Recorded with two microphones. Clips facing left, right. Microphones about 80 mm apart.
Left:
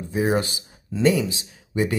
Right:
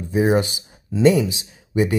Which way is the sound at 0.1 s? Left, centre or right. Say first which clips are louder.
Right 4 dB; centre.